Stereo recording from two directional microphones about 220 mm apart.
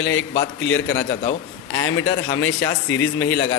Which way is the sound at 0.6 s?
60° left (ahead or behind).